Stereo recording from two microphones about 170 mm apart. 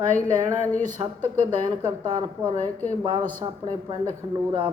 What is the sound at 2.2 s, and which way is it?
Speech, 20° right (ahead or behind).